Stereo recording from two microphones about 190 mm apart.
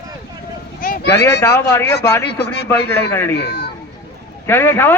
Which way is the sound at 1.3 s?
15° left (ahead or behind).